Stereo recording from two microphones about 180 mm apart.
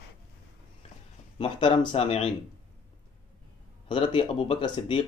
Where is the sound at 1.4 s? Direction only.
25° left (ahead or behind).